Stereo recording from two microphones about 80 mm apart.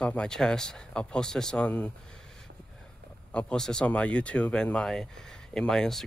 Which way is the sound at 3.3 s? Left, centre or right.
Centre.